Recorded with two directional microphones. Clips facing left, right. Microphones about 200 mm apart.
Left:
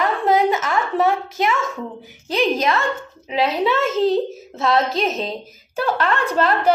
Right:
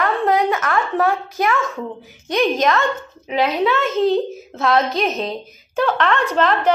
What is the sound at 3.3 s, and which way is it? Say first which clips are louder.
A woman's voice: right 1 dB; centre (ahead or behind).